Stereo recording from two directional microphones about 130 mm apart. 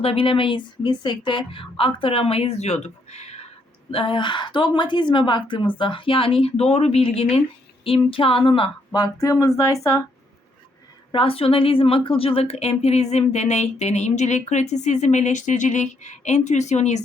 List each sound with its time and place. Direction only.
0.0 s a woman's voice: 50° left (ahead or behind)
3.9 s a woman's voice: 40° left (ahead or behind); by 9.7 s 25° left (ahead or behind)
11.1 s a woman's voice: 45° left (ahead or behind); by 17.0 s 60° left (ahead or behind)